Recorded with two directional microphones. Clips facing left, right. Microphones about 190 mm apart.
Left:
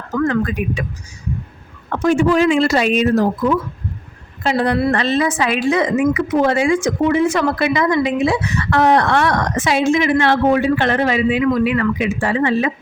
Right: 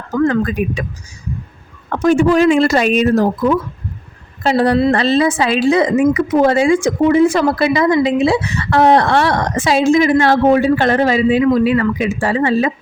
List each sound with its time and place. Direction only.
0.2 s speech: 35° right (ahead or behind)
1.9 s speech: 40° right (ahead or behind)